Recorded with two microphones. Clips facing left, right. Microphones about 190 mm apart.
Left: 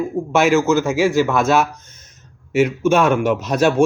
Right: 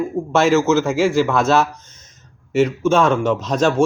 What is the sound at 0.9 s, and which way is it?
Speech, 15° left (ahead or behind).